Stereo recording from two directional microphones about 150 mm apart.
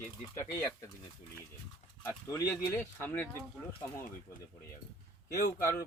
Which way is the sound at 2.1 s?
20° left (ahead or behind).